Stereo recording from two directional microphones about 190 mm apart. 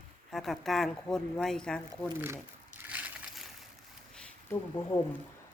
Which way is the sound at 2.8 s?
10° right (ahead or behind).